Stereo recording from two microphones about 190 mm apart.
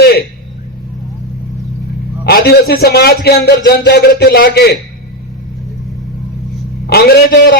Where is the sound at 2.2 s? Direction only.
55° left (ahead or behind).